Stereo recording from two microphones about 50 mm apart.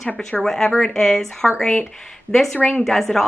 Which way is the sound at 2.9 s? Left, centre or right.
Centre.